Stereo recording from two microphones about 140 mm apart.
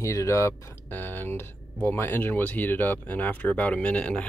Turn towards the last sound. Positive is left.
turn(degrees=10)  # may be behind; listen again after turning